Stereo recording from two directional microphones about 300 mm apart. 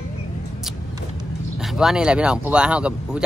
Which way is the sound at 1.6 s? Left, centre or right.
Centre.